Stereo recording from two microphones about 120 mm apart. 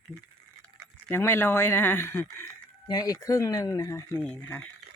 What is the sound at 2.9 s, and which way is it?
Speech, 30° left (ahead or behind).